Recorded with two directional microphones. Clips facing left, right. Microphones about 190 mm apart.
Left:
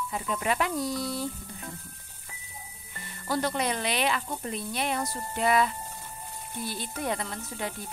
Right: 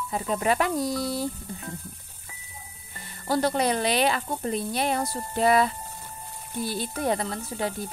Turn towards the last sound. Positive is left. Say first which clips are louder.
# right 5 dB
turn(degrees=-35)  # may be behind; listen again after turning